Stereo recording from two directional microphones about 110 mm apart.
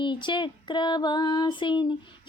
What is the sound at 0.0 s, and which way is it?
Female singing, 45° left (ahead or behind).